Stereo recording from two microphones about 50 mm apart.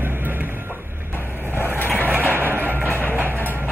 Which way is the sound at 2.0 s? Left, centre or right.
Right.